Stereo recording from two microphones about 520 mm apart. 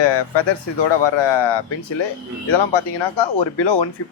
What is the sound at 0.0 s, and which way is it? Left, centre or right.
A man's voice, left.